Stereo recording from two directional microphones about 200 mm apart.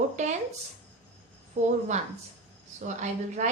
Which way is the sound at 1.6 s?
35° right (ahead or behind).